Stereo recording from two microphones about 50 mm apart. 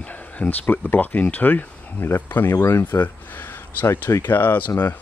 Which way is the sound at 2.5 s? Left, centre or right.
Left.